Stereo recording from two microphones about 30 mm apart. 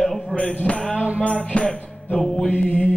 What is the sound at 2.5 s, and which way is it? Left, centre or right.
Mantra, left.